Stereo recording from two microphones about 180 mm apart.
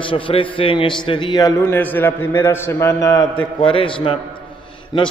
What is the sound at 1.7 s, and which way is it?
A man's voice, 10° left (ahead or behind).